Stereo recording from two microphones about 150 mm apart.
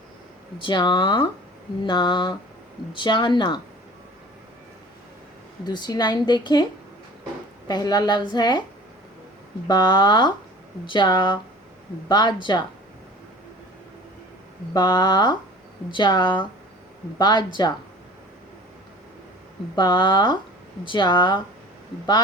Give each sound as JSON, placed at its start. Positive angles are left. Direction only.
{"t": 0.6, "sound": "a woman's voice", "side_deg": 30}
{"t": 5.6, "sound": "a woman's voice", "side_deg": 30}
{"t": 7.7, "sound": "a woman's voice", "side_deg": 25}
{"t": 9.6, "sound": "a woman's voice", "side_deg": 30}
{"t": 14.7, "sound": "a woman's voice", "side_deg": 30}
{"t": 19.7, "sound": "a woman's voice", "side_deg": 30}